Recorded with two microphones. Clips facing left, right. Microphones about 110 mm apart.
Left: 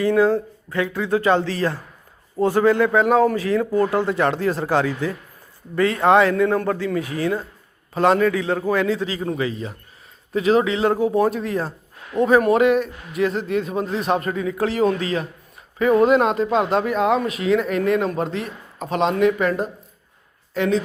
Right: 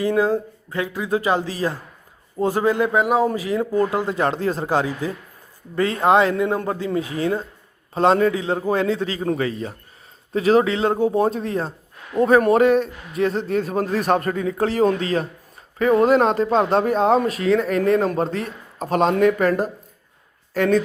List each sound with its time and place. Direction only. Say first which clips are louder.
0.0 s a man's voice: left 2 dB; 20° right (ahead or behind)
5.7 s a man's voice: left 1 dB; 30° right (ahead or behind)
9.2 s a man's voice: right 2 dB; 40° right (ahead or behind)
13.9 s speech: right 2 dB; 50° right (ahead or behind)
14.2 s speech: right 1 dB; 35° right (ahead or behind)